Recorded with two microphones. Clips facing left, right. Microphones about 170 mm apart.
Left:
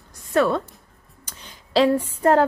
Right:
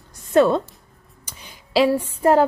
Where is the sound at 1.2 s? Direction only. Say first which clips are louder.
Right 1 dB; 10° right (ahead or behind).